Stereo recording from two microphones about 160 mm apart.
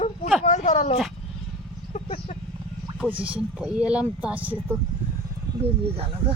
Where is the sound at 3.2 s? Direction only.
5° right (ahead or behind).